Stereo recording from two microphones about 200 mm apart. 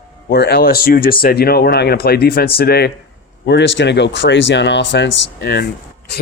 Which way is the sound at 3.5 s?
60° left (ahead or behind).